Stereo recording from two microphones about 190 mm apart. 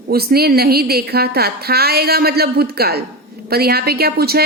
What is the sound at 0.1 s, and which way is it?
A woman's voice, 55° right (ahead or behind).